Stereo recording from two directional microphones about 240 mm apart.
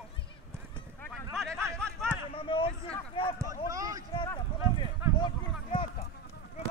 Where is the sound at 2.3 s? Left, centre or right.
Left.